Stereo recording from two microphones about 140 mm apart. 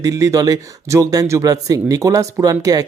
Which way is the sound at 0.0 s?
25° right (ahead or behind).